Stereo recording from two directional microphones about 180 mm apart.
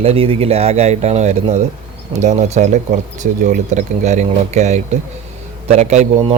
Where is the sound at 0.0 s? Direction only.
35° right (ahead or behind).